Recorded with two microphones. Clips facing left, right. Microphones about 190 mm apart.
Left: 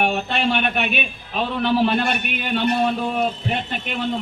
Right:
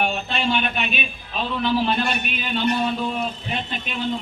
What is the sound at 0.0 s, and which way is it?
A man's voice, 60° left (ahead or behind).